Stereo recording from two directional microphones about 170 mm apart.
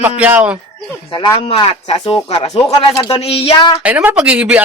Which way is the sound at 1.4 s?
35° left (ahead or behind).